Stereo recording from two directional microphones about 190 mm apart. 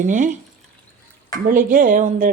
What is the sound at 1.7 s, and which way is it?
Speech, 45° right (ahead or behind).